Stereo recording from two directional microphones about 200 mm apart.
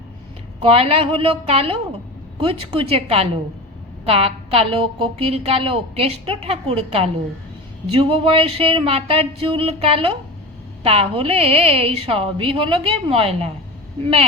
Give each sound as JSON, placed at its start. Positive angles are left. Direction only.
{"t": 0.6, "sound": "a woman's voice", "side_deg": -30}